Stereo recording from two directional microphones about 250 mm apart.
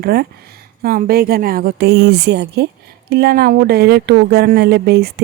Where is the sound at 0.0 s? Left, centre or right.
Right.